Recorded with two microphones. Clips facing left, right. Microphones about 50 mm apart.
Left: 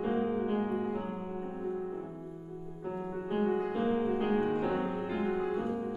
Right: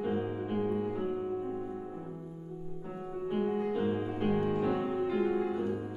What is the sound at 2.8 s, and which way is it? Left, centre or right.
Music, centre.